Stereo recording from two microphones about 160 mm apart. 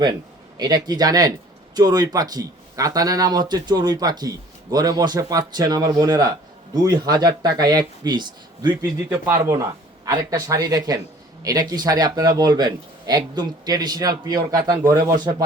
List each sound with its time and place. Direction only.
0.0 s speech: 25° right (ahead or behind)
9.2 s speech: 15° right (ahead or behind)